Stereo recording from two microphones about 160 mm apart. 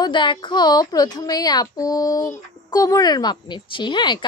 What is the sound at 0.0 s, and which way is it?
A woman's voice, 30° left (ahead or behind).